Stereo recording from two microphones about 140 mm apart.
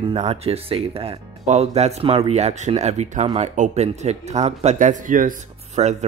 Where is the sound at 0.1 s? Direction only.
45° right (ahead or behind); by 5.3 s 70° right (ahead or behind).